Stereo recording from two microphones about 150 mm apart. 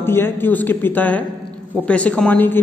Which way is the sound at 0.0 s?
15° left (ahead or behind).